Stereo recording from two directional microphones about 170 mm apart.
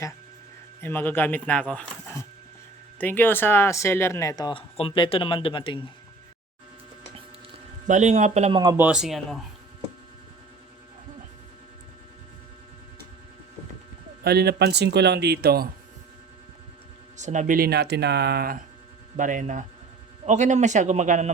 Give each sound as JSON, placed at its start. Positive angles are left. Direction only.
{"t": 0.8, "sound": "speech", "side_deg": 10}
{"t": 7.9, "sound": "speech", "side_deg": -45}
{"t": 8.7, "sound": "speech", "side_deg": -10}
{"t": 14.3, "sound": "speech", "side_deg": -70}
{"t": 17.2, "sound": "speech", "side_deg": -45}
{"t": 19.1, "sound": "speech", "side_deg": -50}